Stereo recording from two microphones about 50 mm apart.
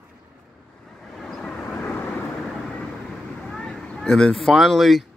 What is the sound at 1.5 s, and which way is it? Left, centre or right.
Vehicle, left.